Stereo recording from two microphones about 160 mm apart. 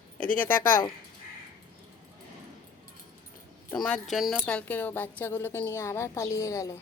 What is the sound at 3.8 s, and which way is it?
A woman's voice, centre (ahead or behind).